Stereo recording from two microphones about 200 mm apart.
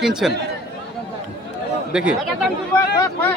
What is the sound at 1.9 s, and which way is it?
Speech, 5° right (ahead or behind).